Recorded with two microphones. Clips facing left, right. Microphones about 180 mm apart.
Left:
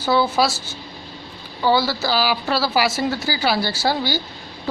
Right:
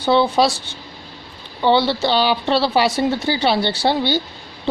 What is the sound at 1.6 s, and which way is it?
Speech, 25° right (ahead or behind).